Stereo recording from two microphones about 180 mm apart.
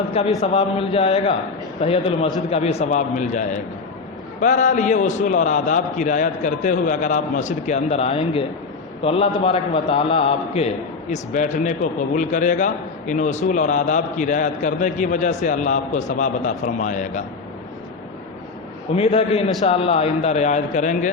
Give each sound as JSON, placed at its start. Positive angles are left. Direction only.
{"t": 0.1, "sound": "a man's voice", "side_deg": 35}
{"t": 18.9, "sound": "a man's voice", "side_deg": 35}